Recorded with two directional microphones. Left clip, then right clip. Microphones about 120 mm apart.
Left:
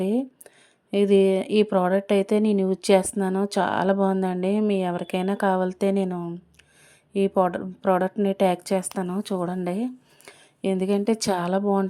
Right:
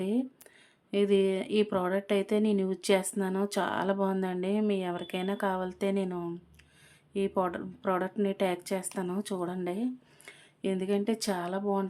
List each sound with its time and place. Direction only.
0.0 s a sound: 40° left (ahead or behind)
0.9 s speech: 45° left (ahead or behind); by 11.6 s 65° left (ahead or behind)
11.6 s speech: 45° left (ahead or behind)